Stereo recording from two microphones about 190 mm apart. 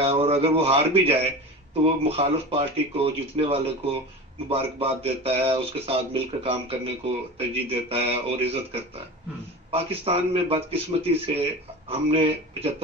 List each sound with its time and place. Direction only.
0.0 s speech: 30° right (ahead or behind)